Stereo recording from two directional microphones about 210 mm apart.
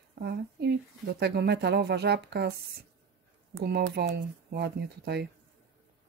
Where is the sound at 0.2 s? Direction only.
50° right (ahead or behind).